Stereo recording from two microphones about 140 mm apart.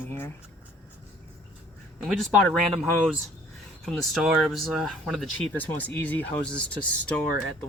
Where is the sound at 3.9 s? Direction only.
Centre (ahead or behind).